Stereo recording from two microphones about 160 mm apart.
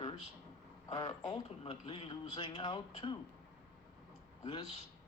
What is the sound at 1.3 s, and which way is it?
Speech, 35° left (ahead or behind).